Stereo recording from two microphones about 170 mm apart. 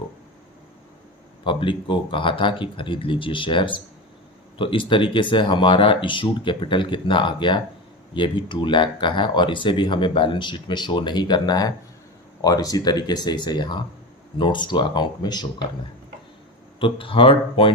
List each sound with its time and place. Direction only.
1.5 s speech: 30° left (ahead or behind)
16.8 s speech: 30° left (ahead or behind)